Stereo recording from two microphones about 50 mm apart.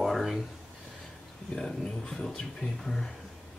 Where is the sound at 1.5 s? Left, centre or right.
Centre.